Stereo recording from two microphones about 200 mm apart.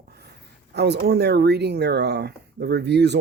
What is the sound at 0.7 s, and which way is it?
Speech, 55° right (ahead or behind).